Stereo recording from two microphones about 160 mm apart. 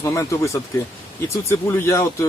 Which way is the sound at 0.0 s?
20° left (ahead or behind).